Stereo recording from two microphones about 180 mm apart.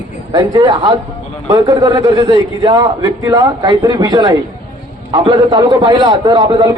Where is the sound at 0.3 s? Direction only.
20° right (ahead or behind).